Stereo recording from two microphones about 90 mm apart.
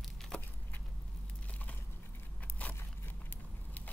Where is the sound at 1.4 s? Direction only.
15° left (ahead or behind).